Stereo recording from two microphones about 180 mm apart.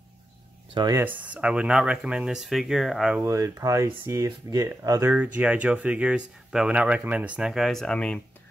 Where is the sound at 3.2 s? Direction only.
15° right (ahead or behind).